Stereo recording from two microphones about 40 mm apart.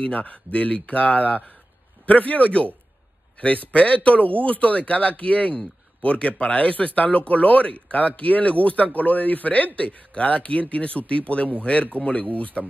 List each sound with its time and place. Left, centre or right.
0.0 s speech: left